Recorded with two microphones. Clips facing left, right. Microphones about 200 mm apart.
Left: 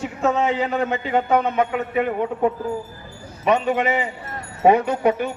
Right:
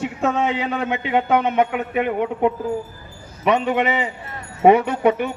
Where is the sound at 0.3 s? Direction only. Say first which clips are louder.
Left 2 dB; 70° right (ahead or behind).